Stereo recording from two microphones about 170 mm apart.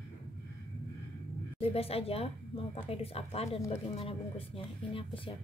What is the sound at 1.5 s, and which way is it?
Speech, 35° left (ahead or behind).